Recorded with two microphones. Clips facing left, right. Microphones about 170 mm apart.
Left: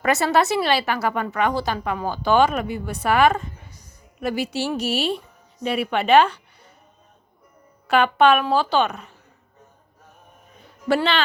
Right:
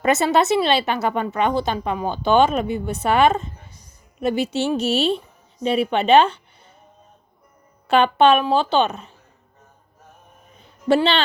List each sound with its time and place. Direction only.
0.0 s speech: 20° right (ahead or behind)
7.9 s speech: 25° right (ahead or behind)
10.8 s speech: 25° right (ahead or behind)